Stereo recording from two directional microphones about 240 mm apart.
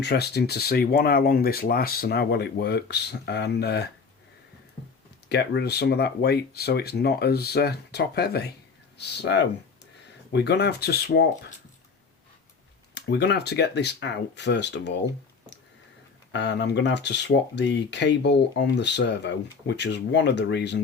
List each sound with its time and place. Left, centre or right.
0.0 s speech: left
5.3 s speech: left
12.9 s speech: left
16.3 s speech: left